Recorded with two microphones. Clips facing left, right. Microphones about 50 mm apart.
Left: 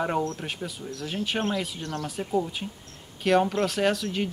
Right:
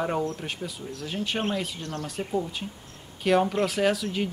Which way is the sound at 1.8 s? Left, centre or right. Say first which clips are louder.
Left 1 dB; left.